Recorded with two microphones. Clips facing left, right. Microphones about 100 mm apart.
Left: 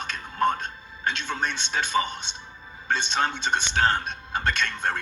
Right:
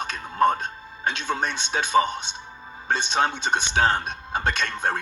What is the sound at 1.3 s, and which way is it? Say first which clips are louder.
Speech: right 3 dB; 45° right (ahead or behind).